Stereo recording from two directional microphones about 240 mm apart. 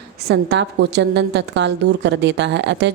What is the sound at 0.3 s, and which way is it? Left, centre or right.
A woman's voice, right.